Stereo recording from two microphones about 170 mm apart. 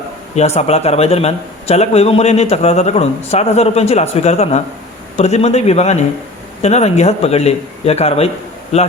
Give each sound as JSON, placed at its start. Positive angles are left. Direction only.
{"t": 0.3, "sound": "speech", "side_deg": 40}